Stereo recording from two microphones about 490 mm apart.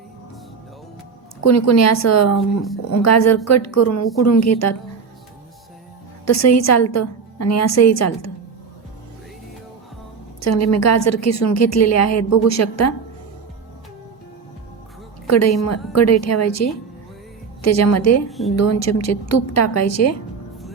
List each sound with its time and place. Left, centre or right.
1.5 s a woman's voice: left
2.4 s speech: centre
2.9 s a woman's voice: left
6.2 s a woman's voice: left
10.4 s a woman's voice: left
15.3 s a woman's voice: left
18.3 s speech: centre
18.5 s a woman's voice: left